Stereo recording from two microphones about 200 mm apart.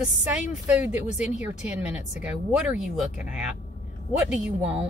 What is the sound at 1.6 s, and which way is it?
Speech, 10° right (ahead or behind).